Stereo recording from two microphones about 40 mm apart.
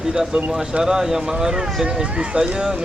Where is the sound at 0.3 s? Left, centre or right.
Right.